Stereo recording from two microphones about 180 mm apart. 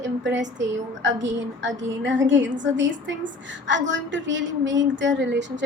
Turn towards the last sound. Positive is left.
turn(degrees=-80)